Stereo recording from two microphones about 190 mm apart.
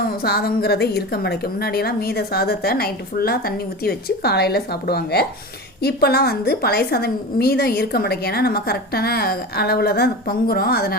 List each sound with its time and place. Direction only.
0.0 s a woman's voice: 55° left (ahead or behind)